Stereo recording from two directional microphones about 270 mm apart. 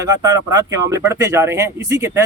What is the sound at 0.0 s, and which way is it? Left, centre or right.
Speech, centre.